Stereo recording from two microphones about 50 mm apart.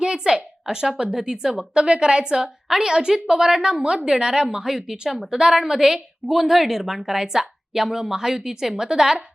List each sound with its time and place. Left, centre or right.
0.0 s a woman's voice: centre